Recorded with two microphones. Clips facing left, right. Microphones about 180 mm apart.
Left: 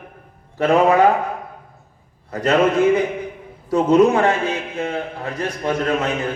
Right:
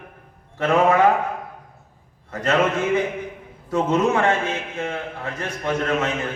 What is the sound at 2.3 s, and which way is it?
A man's voice, 35° left (ahead or behind).